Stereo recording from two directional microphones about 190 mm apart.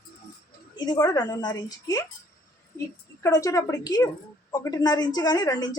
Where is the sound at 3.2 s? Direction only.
15° left (ahead or behind).